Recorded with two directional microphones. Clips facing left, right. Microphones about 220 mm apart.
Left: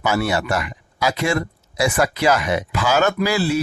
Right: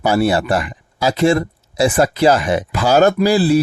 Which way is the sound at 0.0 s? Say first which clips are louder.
Right 5 dB; 35° right (ahead or behind).